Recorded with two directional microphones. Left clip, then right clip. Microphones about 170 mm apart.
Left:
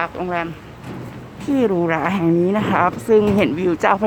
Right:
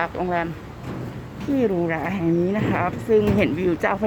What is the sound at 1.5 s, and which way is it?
Speech, 25° left (ahead or behind).